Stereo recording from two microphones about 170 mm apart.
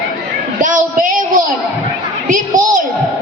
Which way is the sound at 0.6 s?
50° right (ahead or behind).